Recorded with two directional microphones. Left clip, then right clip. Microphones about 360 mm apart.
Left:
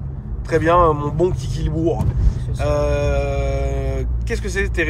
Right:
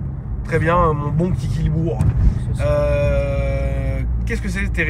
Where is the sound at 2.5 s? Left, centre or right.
Centre.